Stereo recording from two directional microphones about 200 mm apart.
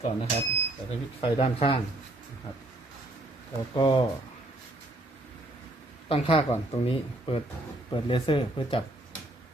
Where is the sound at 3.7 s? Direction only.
25° left (ahead or behind).